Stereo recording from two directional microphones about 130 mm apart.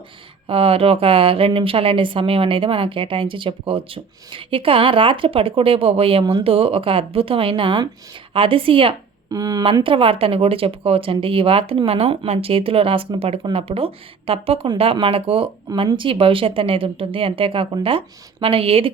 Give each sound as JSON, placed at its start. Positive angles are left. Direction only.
{"t": 0.4, "sound": "a woman's voice", "side_deg": -45}
{"t": 9.3, "sound": "speech", "side_deg": -30}
{"t": 9.8, "sound": "a woman's voice", "side_deg": -45}